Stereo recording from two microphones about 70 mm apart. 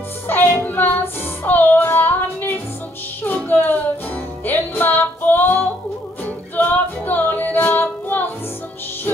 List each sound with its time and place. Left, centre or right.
0.3 s child singing: left
3.3 s music: left
6.5 s female singing: left